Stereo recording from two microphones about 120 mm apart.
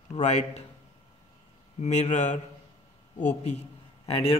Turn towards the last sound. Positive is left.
turn(degrees=55)  # may be behind; listen again after turning